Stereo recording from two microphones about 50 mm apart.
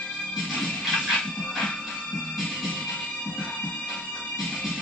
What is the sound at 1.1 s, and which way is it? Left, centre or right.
Music, left.